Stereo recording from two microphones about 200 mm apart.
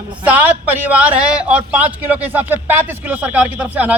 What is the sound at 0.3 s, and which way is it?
A man's voice, 10° right (ahead or behind).